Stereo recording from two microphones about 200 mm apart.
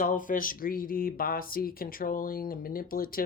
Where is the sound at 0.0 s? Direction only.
40° left (ahead or behind).